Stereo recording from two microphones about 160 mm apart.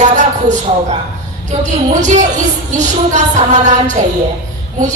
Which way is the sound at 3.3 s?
45° right (ahead or behind).